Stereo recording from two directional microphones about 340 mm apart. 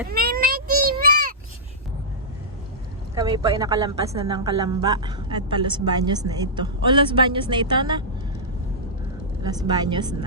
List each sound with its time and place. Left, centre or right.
0.1 s vehicle: right
3.2 s a woman's voice: centre
9.4 s a woman's voice: centre